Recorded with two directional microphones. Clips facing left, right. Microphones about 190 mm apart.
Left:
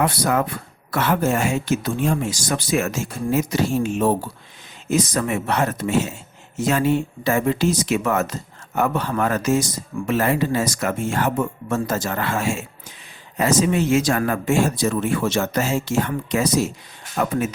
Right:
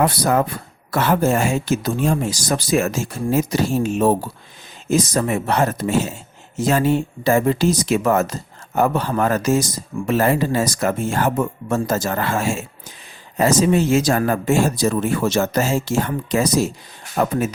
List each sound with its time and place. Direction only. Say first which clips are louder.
0.0 s speech: right 3 dB; 35° right (ahead or behind)